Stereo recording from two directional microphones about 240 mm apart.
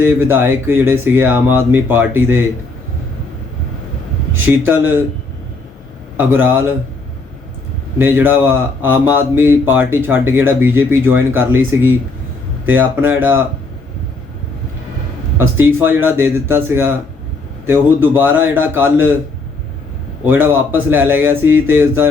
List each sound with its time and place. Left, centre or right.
0.0 s speech: centre
4.6 s speech: centre
6.1 s speech: centre
7.9 s speech: centre
15.4 s speech: centre
20.2 s speech: centre